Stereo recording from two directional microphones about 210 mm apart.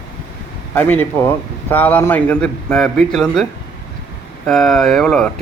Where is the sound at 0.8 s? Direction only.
10° left (ahead or behind).